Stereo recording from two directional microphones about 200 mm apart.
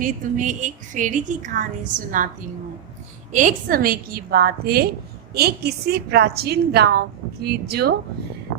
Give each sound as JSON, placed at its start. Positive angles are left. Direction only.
{"t": 0.0, "sound": "a woman's voice", "side_deg": -40}
{"t": 3.3, "sound": "a woman's voice", "side_deg": -45}